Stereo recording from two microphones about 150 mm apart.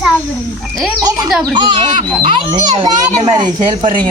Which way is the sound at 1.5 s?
30° right (ahead or behind).